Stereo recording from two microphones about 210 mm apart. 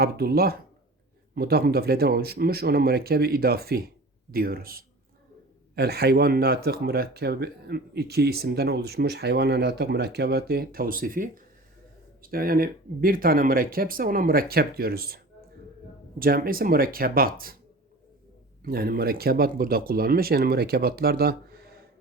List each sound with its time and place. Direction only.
0.0 s speech: 45° right (ahead or behind)
18.6 s speech: 45° right (ahead or behind)